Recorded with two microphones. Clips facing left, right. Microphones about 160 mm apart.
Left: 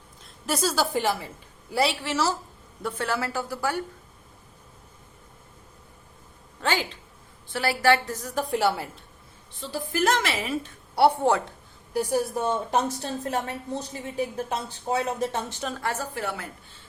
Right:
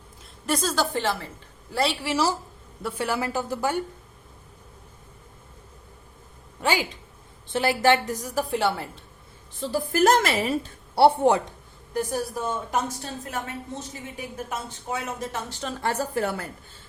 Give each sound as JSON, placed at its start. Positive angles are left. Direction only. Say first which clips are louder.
{"t": 0.4, "sound": "a woman's voice", "louder": "even", "side_deg": 5}
{"t": 2.0, "sound": "a woman's voice", "louder": "right 2 dB", "side_deg": -10}
{"t": 6.6, "sound": "a woman's voice", "louder": "right 2 dB", "side_deg": -10}
{"t": 9.6, "sound": "a woman's voice", "louder": "right 5 dB", "side_deg": -45}
{"t": 11.9, "sound": "a woman's voice", "louder": "left 2 dB", "side_deg": 15}
{"t": 15.6, "sound": "a woman's voice", "louder": "even", "side_deg": 5}
{"t": 16.1, "sound": "a woman's voice", "louder": "right 5 dB", "side_deg": -45}